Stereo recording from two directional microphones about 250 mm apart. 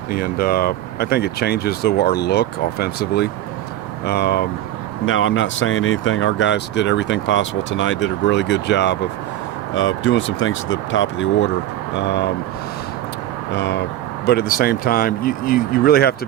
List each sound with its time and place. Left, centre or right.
0.1 s speech: left
13.5 s speech: left